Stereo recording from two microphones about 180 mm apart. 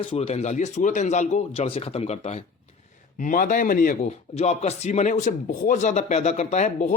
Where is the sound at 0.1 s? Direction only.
35° left (ahead or behind).